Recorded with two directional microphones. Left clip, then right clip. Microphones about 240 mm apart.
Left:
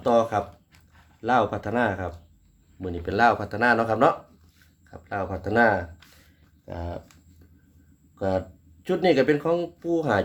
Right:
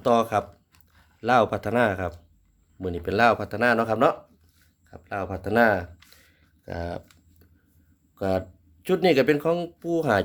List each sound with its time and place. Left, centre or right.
0.0 s a sound: right
1.2 s speech: right
6.7 s speech: right
8.1 s speech: right